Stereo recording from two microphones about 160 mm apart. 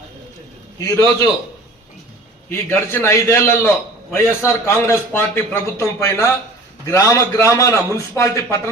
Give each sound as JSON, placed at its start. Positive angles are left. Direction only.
{"t": 0.8, "sound": "a man's voice", "side_deg": 20}
{"t": 2.5, "sound": "a man's voice", "side_deg": 15}